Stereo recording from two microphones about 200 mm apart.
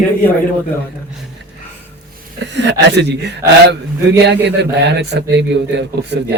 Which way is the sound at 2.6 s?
60° right (ahead or behind).